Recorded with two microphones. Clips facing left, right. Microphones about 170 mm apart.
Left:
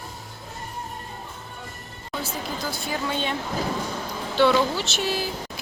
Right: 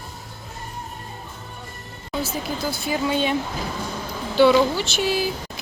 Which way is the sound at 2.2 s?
5° right (ahead or behind).